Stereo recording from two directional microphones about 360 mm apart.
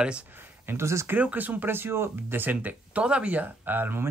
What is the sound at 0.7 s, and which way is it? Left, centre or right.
Speech, centre.